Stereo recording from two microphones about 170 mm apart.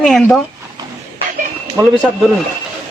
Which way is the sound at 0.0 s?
5° left (ahead or behind).